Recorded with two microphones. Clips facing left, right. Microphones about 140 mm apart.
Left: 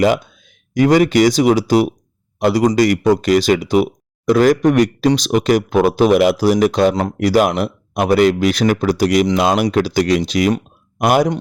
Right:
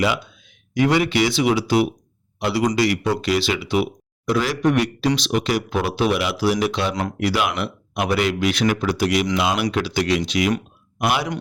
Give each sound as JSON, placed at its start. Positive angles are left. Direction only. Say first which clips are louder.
{"t": 0.0, "sound": "speech", "louder": "left 7 dB", "side_deg": 45}